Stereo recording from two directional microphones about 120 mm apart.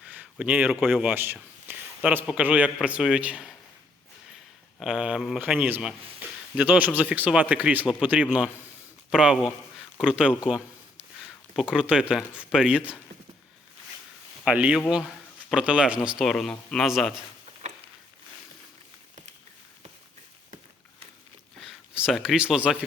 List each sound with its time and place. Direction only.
0.0 s a sound: 10° right (ahead or behind)
2.0 s speech: 10° right (ahead or behind)
4.8 s speech: 5° right (ahead or behind)
5.4 s speech: 15° right (ahead or behind)
14.4 s a man's voice: 10° right (ahead or behind)
16.1 s speech: centre (ahead or behind)
21.6 s speech: 5° right (ahead or behind)